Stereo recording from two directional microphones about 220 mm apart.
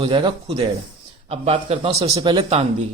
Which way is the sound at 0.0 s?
20° right (ahead or behind).